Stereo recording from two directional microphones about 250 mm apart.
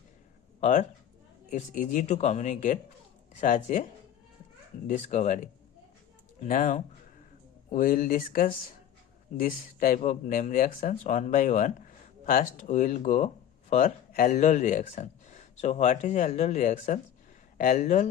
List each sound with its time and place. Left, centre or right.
0.6 s speech: left
4.9 s speech: left